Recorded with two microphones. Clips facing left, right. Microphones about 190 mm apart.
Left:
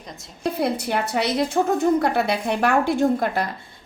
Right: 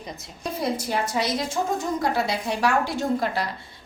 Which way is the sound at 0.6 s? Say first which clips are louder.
Left 1 dB; 60° left (ahead or behind).